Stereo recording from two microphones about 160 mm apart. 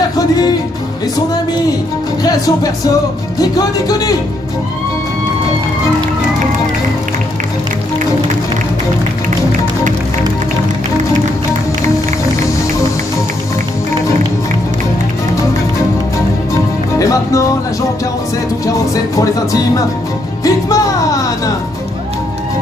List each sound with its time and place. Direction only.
2.2 s music: 25° left (ahead or behind)
17.0 s music: 20° left (ahead or behind)
18.7 s music: 20° left (ahead or behind)